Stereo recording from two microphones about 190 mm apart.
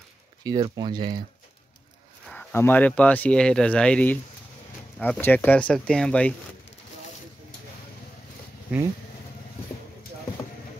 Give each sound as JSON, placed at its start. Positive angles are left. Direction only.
{"t": 0.4, "sound": "speech", "side_deg": -20}
{"t": 2.2, "sound": "speech", "side_deg": 10}
{"t": 8.7, "sound": "speech", "side_deg": -5}